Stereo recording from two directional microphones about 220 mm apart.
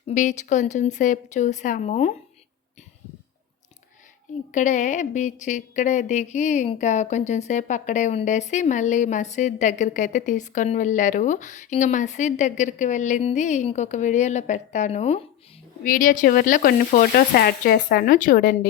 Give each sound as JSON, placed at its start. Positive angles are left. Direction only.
{"t": 0.1, "sound": "a woman's voice", "side_deg": 35}
{"t": 4.5, "sound": "a woman's voice", "side_deg": 35}